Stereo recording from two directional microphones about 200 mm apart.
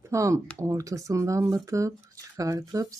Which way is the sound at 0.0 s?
15° right (ahead or behind).